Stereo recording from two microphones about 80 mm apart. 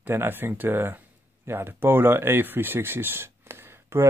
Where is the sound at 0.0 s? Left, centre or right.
Right.